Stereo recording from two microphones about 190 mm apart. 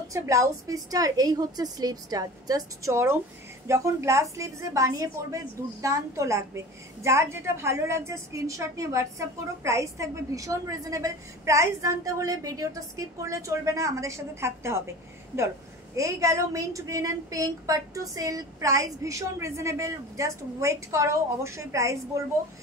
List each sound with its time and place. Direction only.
0.1 s a woman's voice: 15° right (ahead or behind)
16.0 s a woman's voice: 15° right (ahead or behind)